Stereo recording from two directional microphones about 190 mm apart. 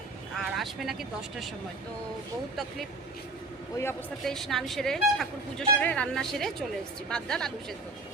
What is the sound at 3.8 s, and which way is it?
Speech, 15° left (ahead or behind).